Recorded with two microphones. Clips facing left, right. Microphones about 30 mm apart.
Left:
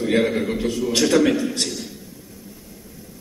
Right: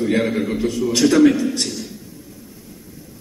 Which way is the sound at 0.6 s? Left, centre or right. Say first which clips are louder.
Right 5 dB; left.